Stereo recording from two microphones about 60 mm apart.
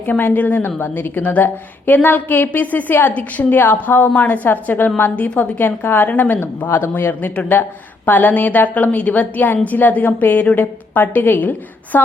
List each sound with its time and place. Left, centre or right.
0.0 s a woman's voice: left
6.7 s a woman's voice: left